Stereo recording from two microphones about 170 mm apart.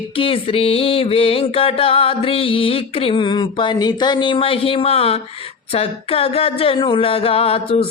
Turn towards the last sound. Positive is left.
turn(degrees=35)  # may be behind; listen again after turning